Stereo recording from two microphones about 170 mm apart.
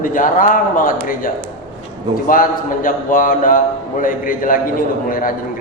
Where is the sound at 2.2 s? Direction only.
55° left (ahead or behind).